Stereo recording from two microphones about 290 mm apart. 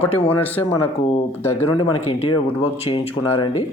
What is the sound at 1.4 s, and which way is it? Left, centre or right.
Speech, centre.